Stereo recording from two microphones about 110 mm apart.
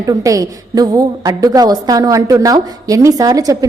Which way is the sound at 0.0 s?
30° right (ahead or behind).